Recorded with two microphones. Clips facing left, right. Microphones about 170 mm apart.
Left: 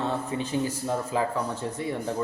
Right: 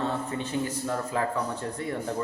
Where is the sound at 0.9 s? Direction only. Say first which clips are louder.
Left 2 dB; 15° left (ahead or behind).